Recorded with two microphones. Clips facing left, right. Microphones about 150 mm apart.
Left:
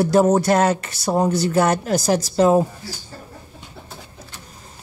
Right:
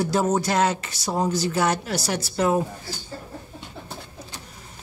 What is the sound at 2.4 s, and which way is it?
Speech, 30° left (ahead or behind).